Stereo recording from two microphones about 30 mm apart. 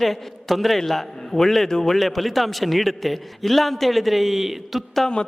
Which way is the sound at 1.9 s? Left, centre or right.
Centre.